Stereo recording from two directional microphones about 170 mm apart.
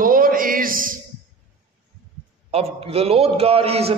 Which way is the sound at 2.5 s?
35° right (ahead or behind).